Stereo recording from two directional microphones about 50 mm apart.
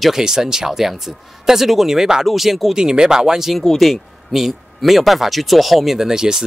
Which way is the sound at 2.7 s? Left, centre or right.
Centre.